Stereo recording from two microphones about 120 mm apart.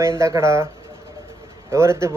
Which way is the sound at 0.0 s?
25° right (ahead or behind).